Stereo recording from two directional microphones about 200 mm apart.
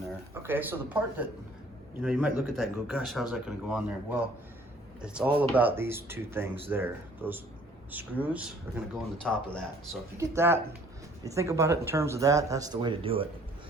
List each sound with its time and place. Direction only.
0.0 s speech: 10° right (ahead or behind)
9.2 s speech: 5° left (ahead or behind)
10.2 s speech: 10° right (ahead or behind)